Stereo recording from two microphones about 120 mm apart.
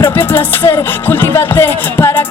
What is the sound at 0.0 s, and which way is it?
Music, 20° left (ahead or behind).